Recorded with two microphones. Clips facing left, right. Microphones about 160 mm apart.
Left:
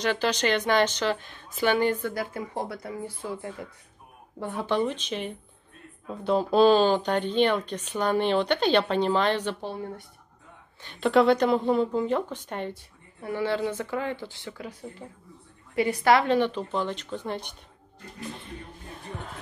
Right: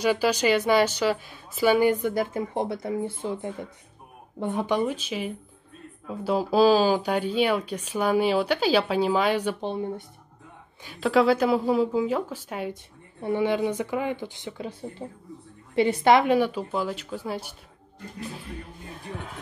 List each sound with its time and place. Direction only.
0.0 s speech: 10° right (ahead or behind)
9.6 s speech: 20° right (ahead or behind)
10.8 s speech: 5° right (ahead or behind)
13.2 s speech: 20° right (ahead or behind); by 19.3 s centre (ahead or behind)